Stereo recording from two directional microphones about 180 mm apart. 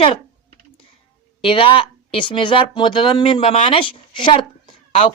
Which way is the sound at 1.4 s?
30° left (ahead or behind).